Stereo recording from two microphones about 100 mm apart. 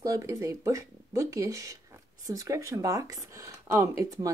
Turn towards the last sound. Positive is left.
turn(degrees=-30)  # may be behind; listen again after turning